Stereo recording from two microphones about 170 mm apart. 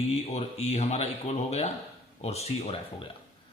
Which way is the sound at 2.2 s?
35° left (ahead or behind).